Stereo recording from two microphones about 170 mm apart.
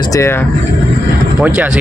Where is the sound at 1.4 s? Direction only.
5° right (ahead or behind).